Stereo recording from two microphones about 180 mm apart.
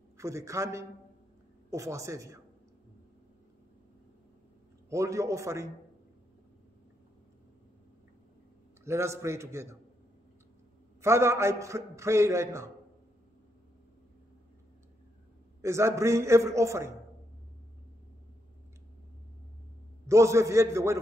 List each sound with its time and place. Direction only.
0.2 s a man's voice: 15° right (ahead or behind)
4.8 s a man's voice: 15° right (ahead or behind)
8.8 s a man's voice: 15° right (ahead or behind)
11.0 s a man's voice: 15° right (ahead or behind)
15.6 s a man's voice: 15° right (ahead or behind)
20.1 s a man's voice: 15° right (ahead or behind)